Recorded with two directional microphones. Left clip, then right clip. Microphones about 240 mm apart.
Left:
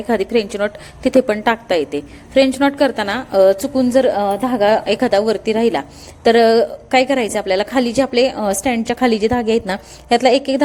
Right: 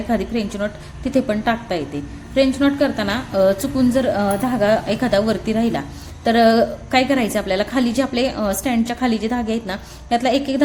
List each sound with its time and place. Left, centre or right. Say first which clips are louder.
0.1 s a woman's voice: left 7 dB; left